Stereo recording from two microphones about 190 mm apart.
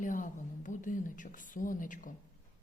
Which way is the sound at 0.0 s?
45° left (ahead or behind).